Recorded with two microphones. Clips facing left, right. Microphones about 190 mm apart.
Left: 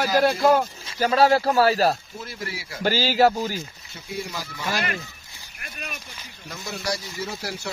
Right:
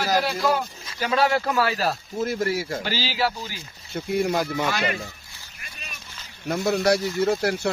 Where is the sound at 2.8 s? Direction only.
45° left (ahead or behind).